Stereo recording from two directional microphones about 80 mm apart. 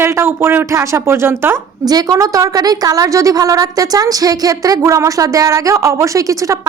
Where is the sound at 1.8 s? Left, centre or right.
Right.